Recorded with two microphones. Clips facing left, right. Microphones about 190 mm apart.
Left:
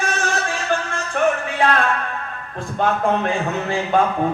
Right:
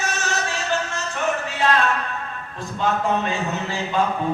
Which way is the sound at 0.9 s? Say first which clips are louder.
Left 5 dB; 55° left (ahead or behind).